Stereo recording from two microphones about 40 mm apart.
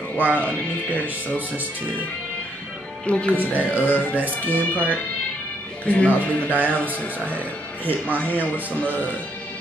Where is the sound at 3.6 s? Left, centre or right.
Left.